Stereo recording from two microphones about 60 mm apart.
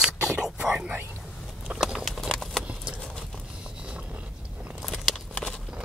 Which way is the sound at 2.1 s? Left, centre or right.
Centre.